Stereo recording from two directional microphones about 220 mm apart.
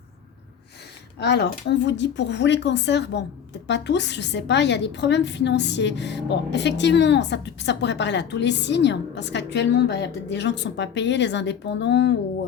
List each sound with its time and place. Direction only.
1.2 s a woman's voice: 50° left (ahead or behind)